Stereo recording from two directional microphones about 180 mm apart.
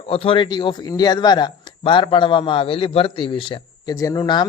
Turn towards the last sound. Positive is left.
turn(degrees=20)  # may be behind; listen again after turning